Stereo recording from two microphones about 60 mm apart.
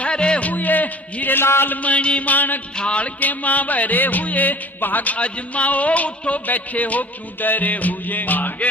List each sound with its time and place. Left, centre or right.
0.0 s a man's voice: centre
2.7 s music: centre